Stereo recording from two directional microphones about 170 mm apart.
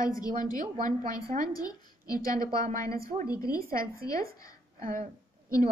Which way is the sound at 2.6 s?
50° right (ahead or behind).